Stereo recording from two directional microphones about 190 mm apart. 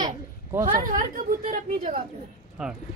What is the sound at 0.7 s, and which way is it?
A woman's voice, 45° right (ahead or behind).